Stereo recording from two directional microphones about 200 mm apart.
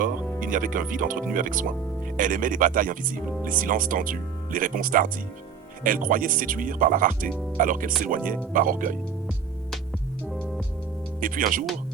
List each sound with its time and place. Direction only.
0.0 s speech: 40° right (ahead or behind)
11.2 s speech: 45° right (ahead or behind)